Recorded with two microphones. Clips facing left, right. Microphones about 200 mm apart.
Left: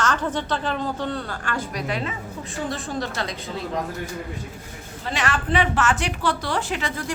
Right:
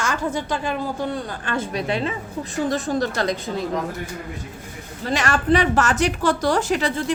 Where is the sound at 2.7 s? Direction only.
40° right (ahead or behind).